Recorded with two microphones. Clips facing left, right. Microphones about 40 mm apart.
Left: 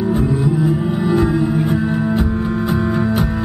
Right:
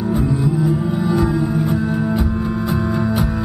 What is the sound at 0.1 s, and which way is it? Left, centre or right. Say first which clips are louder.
Music: left 2 dB; centre.